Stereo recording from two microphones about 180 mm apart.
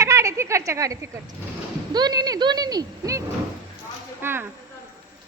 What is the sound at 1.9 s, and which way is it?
Speech, 20° right (ahead or behind).